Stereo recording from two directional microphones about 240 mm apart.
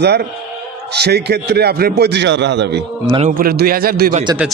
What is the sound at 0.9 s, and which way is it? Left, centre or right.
A man's voice, right.